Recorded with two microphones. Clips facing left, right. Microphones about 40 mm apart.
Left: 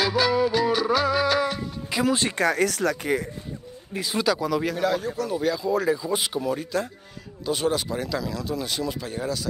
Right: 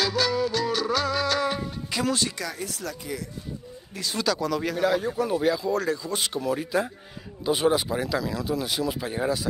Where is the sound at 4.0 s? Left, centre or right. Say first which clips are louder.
Left 3 dB; centre.